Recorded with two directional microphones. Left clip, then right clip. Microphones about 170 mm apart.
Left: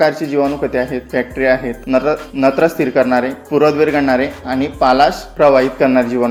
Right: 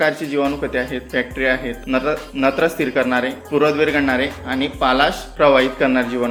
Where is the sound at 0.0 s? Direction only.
40° left (ahead or behind).